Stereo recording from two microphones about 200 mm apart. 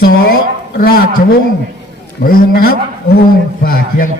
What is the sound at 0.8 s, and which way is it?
Speech, 50° left (ahead or behind).